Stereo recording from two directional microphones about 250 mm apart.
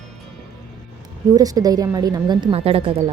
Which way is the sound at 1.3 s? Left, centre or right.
Centre.